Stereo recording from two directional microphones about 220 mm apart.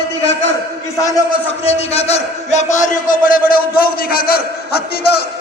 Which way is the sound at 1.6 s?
25° left (ahead or behind).